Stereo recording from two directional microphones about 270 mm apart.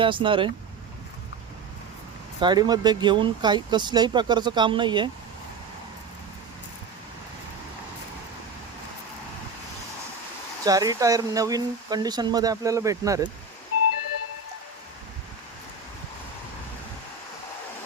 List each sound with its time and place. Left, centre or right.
0.0 s speech: centre
2.4 s speech: centre
10.6 s speech: centre